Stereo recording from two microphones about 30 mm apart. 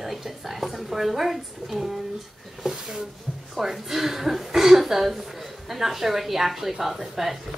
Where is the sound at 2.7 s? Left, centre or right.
Centre.